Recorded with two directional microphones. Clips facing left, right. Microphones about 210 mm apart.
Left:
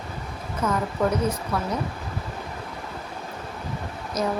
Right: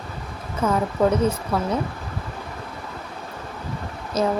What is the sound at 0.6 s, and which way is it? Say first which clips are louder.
Speech: right 3 dB; 30° right (ahead or behind).